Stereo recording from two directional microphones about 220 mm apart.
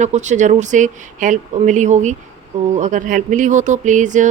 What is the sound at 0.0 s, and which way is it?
A woman's voice, 35° right (ahead or behind).